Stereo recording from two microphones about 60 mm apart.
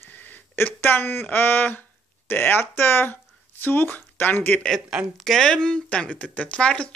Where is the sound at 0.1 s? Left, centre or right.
Left.